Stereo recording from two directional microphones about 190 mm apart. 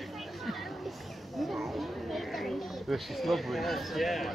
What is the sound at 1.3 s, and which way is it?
Speech, centre (ahead or behind).